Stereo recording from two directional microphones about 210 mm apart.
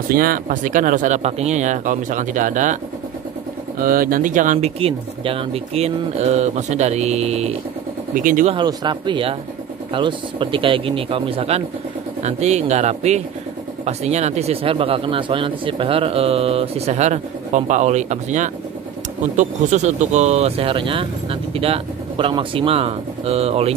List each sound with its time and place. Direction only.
0.1 s speech: 45° right (ahead or behind)
3.8 s speech: 45° right (ahead or behind)
8.5 s a man's voice: 20° right (ahead or behind)